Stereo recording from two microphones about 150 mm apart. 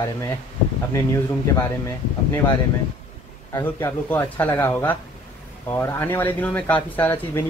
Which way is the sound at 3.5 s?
15° left (ahead or behind).